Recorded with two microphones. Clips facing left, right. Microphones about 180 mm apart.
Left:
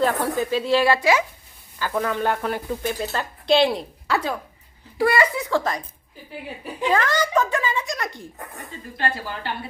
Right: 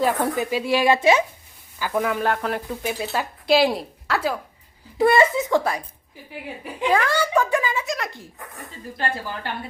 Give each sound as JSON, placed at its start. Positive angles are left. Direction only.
{"t": 0.0, "sound": "speech", "side_deg": -15}
{"t": 0.9, "sound": "a child's voice", "side_deg": -25}
{"t": 1.8, "sound": "a woman's voice", "side_deg": -10}
{"t": 4.9, "sound": "a child's voice", "side_deg": -25}
{"t": 6.9, "sound": "speech", "side_deg": -10}